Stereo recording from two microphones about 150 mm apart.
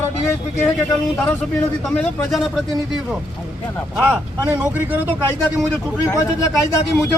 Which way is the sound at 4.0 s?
10° right (ahead or behind).